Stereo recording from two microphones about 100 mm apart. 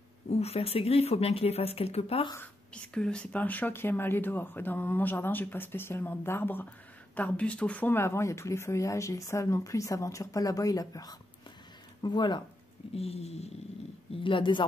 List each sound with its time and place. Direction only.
0.3 s speech: 90° left
2.3 s speech: 15° left (ahead or behind); by 11.1 s 35° left (ahead or behind)
12.0 s speech: 50° left (ahead or behind)
12.9 s speech: 90° left
14.1 s speech: 55° left (ahead or behind)